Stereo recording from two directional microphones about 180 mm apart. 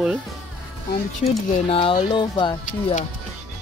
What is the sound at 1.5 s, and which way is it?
Speech, 30° left (ahead or behind).